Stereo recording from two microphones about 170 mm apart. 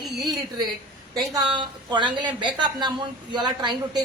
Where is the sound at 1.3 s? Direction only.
25° right (ahead or behind).